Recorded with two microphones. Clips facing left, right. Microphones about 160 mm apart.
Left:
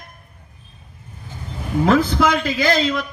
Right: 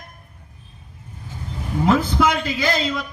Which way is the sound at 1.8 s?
90° left.